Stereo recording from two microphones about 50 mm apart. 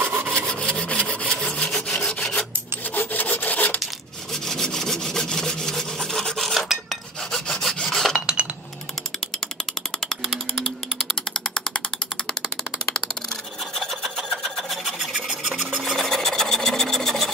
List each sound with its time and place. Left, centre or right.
0.0 s rub: right
0.5 s rub: centre
1.2 s wood: centre
2.0 s rub: centre
2.9 s wood: left
4.3 s rub: centre
7.2 s rub: centre
11.4 s a sound: centre
13.7 s rub: centre
14.3 s sewing machine: centre
15.1 s a sound: centre
16.0 s sewing machine: centre